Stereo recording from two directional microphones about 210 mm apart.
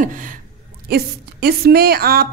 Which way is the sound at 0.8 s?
50° right (ahead or behind).